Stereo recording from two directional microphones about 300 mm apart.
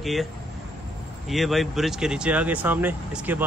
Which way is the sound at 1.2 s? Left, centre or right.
Centre.